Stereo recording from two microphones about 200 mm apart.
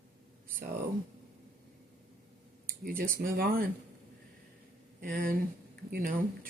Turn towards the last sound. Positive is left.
turn(degrees=-45)  # may be behind; listen again after turning